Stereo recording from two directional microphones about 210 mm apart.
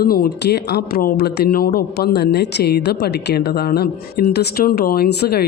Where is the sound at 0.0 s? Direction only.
45° left (ahead or behind).